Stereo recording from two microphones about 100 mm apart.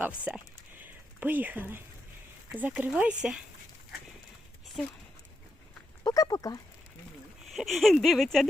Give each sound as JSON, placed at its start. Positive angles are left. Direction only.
{"t": 0.0, "sound": "a sound", "side_deg": -10}
{"t": 2.5, "sound": "speech", "side_deg": -15}
{"t": 6.1, "sound": "speech", "side_deg": 40}
{"t": 7.5, "sound": "speech", "side_deg": 0}